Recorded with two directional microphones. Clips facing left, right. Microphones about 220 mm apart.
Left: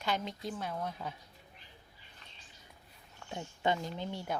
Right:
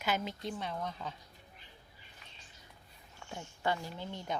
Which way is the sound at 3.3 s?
20° left (ahead or behind).